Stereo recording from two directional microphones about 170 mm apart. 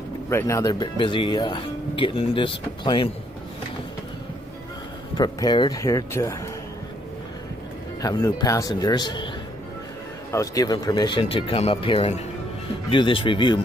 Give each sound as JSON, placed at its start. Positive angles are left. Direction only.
{"t": 0.3, "sound": "speech", "side_deg": 15}
{"t": 5.1, "sound": "speech", "side_deg": 25}
{"t": 8.0, "sound": "speech", "side_deg": 20}
{"t": 10.3, "sound": "speech", "side_deg": 20}